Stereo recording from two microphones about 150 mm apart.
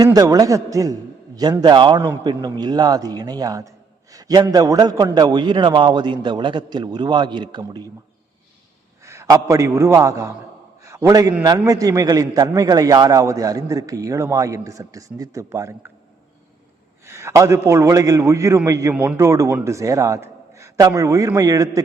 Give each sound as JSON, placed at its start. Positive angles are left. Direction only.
{"t": 0.0, "sound": "a man's voice", "side_deg": -25}
{"t": 4.1, "sound": "a sound", "side_deg": -25}
{"t": 4.5, "sound": "a man's voice", "side_deg": -25}
{"t": 9.0, "sound": "a man's voice", "side_deg": -20}
{"t": 17.1, "sound": "a man's voice", "side_deg": -20}